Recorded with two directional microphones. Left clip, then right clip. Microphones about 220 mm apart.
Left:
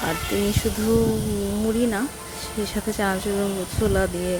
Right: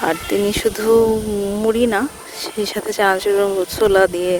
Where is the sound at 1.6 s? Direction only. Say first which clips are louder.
Right 8 dB; 45° right (ahead or behind).